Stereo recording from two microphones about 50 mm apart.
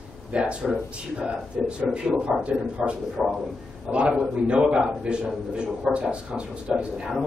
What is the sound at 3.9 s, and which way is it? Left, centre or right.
A man's voice, right.